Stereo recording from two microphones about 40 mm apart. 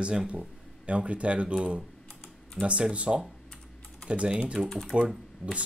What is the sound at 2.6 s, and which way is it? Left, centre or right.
Speech, centre.